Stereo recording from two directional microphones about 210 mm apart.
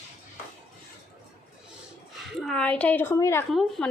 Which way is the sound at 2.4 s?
5° left (ahead or behind).